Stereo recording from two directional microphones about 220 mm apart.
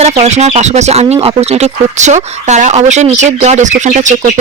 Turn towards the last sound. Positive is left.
turn(degrees=-35)  # may be behind; listen again after turning